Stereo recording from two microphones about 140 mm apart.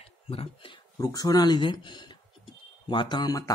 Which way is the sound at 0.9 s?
25° left (ahead or behind).